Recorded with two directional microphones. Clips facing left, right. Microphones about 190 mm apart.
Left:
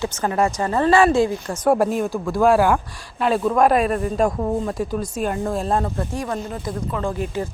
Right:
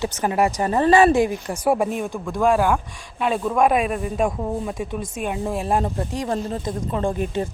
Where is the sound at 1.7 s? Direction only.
Centre (ahead or behind).